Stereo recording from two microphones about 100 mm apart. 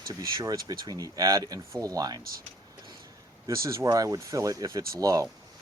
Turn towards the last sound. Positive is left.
turn(degrees=-35)  # may be behind; listen again after turning